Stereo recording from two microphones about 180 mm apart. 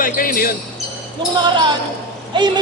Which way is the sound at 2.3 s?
25° right (ahead or behind).